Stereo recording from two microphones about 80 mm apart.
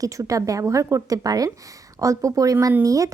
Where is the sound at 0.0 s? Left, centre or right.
Right.